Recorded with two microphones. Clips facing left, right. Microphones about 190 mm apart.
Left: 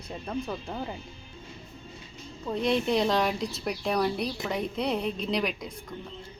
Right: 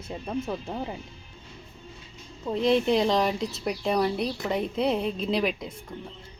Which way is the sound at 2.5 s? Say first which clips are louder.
Right 3 dB; centre (ahead or behind).